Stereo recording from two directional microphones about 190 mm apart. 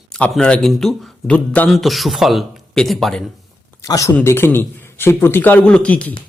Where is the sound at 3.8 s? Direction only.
15° left (ahead or behind).